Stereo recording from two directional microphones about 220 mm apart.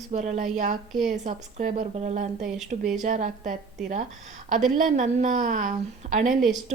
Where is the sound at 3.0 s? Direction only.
35° right (ahead or behind).